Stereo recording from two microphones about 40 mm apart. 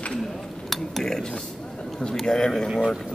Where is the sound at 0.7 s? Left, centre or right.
Centre.